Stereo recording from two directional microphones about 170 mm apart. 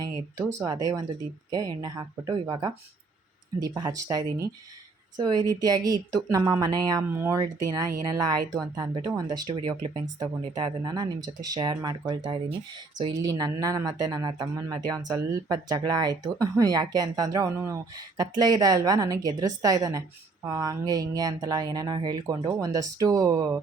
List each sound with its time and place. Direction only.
0.0 s speech: 20° right (ahead or behind)